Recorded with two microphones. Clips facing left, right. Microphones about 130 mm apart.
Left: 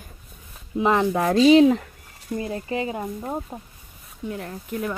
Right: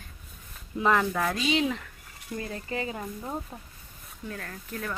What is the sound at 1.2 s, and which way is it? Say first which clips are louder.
Speech: left 13 dB; 35° left (ahead or behind).